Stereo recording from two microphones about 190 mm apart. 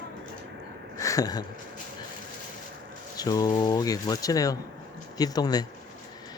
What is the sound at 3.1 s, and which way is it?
Speech, 20° left (ahead or behind).